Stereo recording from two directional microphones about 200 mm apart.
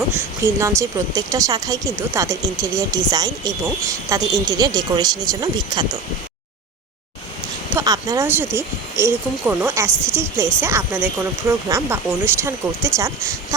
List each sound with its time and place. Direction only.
0.4 s speech: 15° right (ahead or behind)
7.7 s speech: 15° right (ahead or behind)